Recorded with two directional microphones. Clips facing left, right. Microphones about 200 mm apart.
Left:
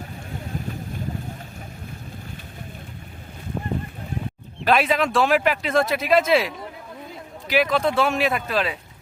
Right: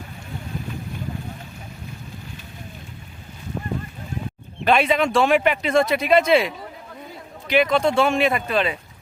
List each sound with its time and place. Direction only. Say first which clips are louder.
4.6 s speech: right 1 dB; centre (ahead or behind)